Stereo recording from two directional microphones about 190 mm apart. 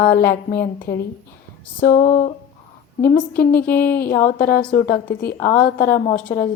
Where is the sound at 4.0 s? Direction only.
50° left (ahead or behind).